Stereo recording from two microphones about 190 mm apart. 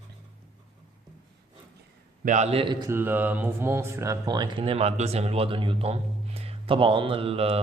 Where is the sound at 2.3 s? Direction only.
35° right (ahead or behind).